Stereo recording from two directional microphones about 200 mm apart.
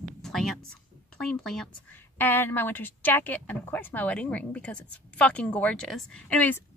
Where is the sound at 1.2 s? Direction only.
Centre (ahead or behind).